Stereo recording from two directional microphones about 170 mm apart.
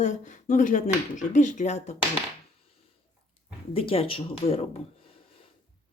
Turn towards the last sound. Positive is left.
turn(degrees=35)  # may be behind; listen again after turning